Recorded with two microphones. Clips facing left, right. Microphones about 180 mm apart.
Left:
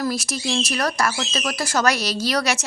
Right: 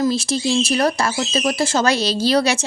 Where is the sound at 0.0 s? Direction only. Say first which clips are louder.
Right 6 dB; 25° right (ahead or behind).